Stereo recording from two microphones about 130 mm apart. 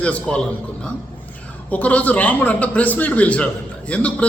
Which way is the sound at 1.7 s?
10° left (ahead or behind).